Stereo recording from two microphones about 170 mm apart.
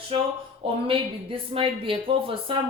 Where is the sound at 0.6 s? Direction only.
35° right (ahead or behind).